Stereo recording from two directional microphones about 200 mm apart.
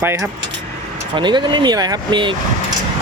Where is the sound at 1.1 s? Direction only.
25° right (ahead or behind).